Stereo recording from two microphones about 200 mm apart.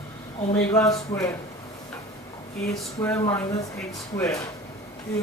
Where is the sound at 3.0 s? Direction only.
15° left (ahead or behind).